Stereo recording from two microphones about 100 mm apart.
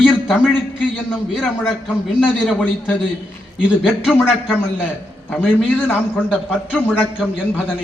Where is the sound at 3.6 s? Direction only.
10° right (ahead or behind).